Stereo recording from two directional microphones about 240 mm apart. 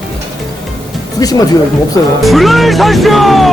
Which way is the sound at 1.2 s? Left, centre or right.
Centre.